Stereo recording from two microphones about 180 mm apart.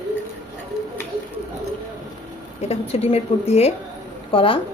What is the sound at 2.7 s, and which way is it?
Speech, 35° left (ahead or behind).